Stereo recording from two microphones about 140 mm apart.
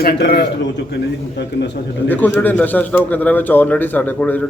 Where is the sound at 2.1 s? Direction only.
15° left (ahead or behind).